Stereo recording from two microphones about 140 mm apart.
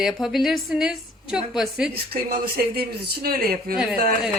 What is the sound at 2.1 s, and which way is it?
Speech, 90° right.